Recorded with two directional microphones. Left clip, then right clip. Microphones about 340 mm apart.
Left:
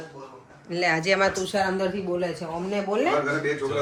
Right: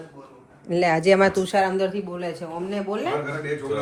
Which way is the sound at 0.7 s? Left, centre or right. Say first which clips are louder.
Right 4 dB; centre.